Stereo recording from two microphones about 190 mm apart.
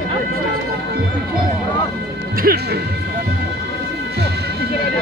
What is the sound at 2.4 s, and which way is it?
Speech, 55° right (ahead or behind).